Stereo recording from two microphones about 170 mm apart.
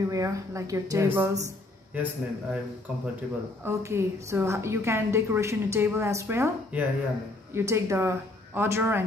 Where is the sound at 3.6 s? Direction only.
15° right (ahead or behind).